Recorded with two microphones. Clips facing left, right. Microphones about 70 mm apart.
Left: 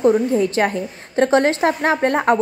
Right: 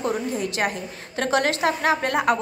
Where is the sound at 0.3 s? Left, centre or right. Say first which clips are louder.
Left 8 dB; left.